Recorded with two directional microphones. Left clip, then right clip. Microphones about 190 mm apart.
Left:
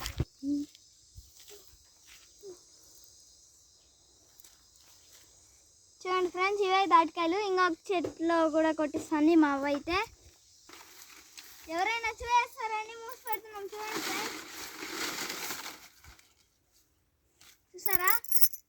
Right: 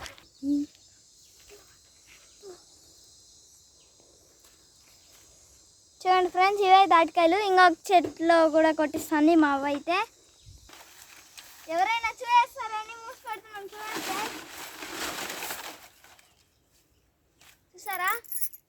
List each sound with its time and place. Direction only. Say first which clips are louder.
6.0 s a child's voice: right 8 dB; 40° right (ahead or behind); by 8.0 s 60° right (ahead or behind)
8.2 s speech: right 3 dB; 45° right (ahead or behind)
9.2 s speech: right 3 dB; 10° right (ahead or behind)
11.7 s a child's voice: right 5 dB; 10° right (ahead or behind)
13.2 s splash: left 1 dB; 10° right (ahead or behind)
17.7 s a child's voice: right 2 dB; 15° right (ahead or behind)